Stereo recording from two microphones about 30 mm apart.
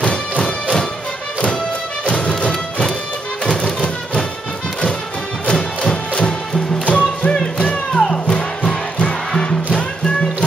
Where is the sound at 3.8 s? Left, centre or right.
Left.